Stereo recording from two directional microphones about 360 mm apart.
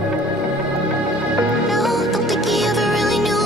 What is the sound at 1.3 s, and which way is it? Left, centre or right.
Music, centre.